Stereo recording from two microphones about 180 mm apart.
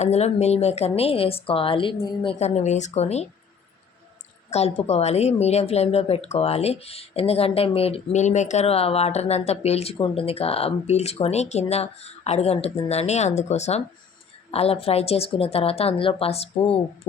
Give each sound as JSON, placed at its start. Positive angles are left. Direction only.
{"t": 0.0, "sound": "a woman's voice", "side_deg": 35}
{"t": 2.4, "sound": "a woman's voice", "side_deg": 40}
{"t": 4.5, "sound": "a woman's voice", "side_deg": 35}